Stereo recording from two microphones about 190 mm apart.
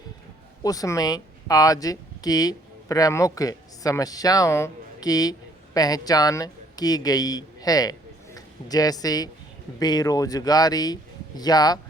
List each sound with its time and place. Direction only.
0.6 s speech: 20° left (ahead or behind)